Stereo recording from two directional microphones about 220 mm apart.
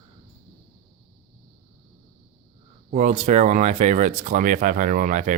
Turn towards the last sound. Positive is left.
turn(degrees=-35)  # may be behind; listen again after turning